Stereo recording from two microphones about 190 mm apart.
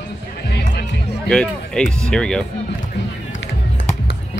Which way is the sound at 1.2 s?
5° left (ahead or behind).